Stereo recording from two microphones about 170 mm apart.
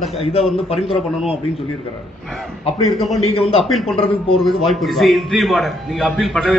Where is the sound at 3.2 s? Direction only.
35° left (ahead or behind).